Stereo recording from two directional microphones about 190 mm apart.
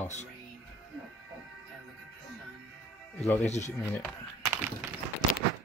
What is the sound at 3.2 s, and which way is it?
Speech, 10° left (ahead or behind).